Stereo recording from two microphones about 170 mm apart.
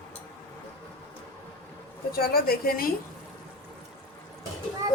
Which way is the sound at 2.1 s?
60° left (ahead or behind).